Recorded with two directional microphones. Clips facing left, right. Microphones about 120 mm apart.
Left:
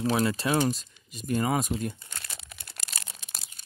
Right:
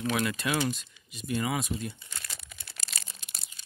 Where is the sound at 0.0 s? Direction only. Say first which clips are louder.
Left 4 dB; 35° left (ahead or behind).